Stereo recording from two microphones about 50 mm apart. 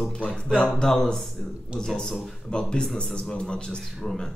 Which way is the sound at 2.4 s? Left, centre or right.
Centre.